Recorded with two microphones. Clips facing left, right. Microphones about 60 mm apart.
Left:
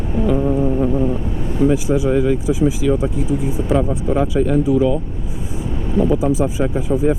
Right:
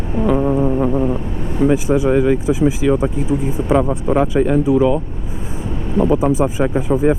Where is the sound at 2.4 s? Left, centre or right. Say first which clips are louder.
Right 2 dB; right.